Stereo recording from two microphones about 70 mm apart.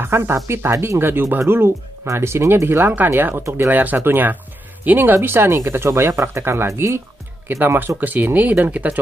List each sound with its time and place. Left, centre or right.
0.0 s speech: right
7.4 s speech: right